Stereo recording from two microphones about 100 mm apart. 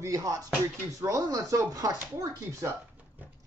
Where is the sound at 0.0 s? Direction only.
35° right (ahead or behind).